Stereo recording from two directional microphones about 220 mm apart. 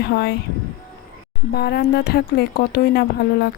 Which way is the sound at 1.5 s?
45° left (ahead or behind).